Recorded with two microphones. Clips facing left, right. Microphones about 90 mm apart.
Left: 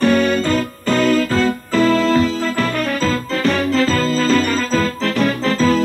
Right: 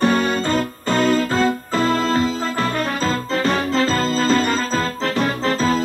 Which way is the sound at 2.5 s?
35° right (ahead or behind).